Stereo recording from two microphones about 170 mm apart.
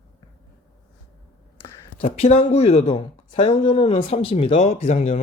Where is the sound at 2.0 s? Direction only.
35° left (ahead or behind).